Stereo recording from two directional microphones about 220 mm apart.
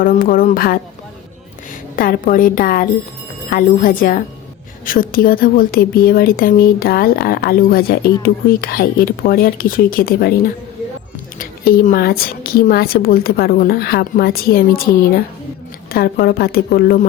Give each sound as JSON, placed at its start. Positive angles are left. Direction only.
{"t": 0.0, "sound": "a woman's voice", "side_deg": 40}
{"t": 2.0, "sound": "a woman's voice", "side_deg": 40}
{"t": 11.3, "sound": "a woman's voice", "side_deg": 40}
{"t": 15.9, "sound": "a woman's voice", "side_deg": 45}